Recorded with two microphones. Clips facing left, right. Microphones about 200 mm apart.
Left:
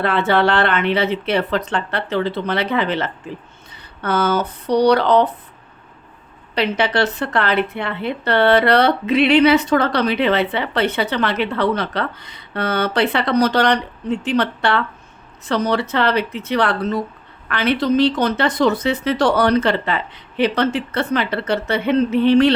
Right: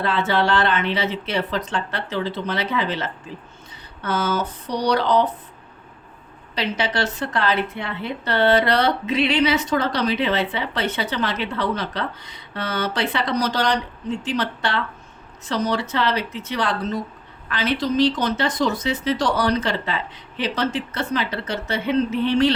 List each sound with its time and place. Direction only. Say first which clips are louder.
0.0 s a woman's voice: left 4 dB; 60° left (ahead or behind)
6.5 s a woman's voice: left 5 dB; 60° left (ahead or behind)